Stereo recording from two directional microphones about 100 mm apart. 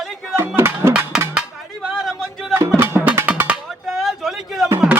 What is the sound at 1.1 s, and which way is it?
Music, 5° right (ahead or behind).